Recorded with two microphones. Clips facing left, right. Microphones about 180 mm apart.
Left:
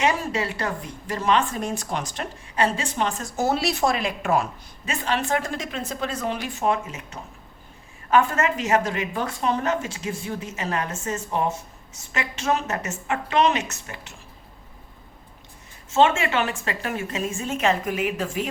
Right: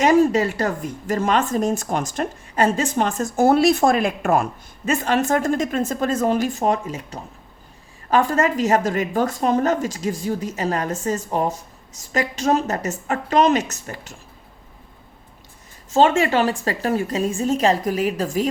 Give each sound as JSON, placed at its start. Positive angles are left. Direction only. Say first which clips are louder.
{"t": 0.0, "sound": "a woman's voice", "louder": "right 9 dB", "side_deg": -45}
{"t": 15.9, "sound": "a woman's voice", "louder": "right 3 dB", "side_deg": -35}